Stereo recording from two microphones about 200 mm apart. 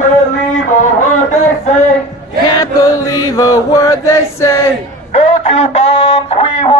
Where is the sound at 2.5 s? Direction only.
15° left (ahead or behind).